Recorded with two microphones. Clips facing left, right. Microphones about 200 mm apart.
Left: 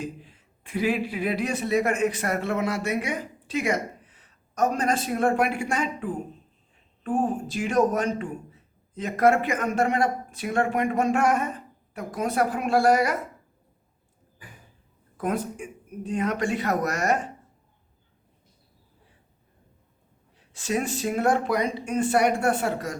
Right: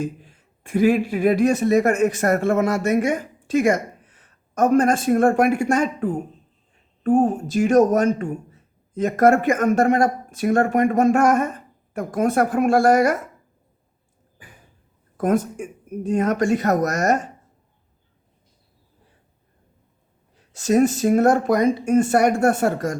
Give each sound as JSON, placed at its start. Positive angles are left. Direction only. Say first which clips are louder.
{"t": 0.0, "sound": "a man's voice", "louder": "right 7 dB", "side_deg": -45}
{"t": 15.2, "sound": "a man's voice", "louder": "right 7 dB", "side_deg": -45}
{"t": 20.3, "sound": "a man's voice", "louder": "right 9 dB", "side_deg": -45}